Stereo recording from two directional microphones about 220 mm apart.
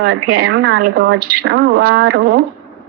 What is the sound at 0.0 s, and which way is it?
Speech, 45° right (ahead or behind).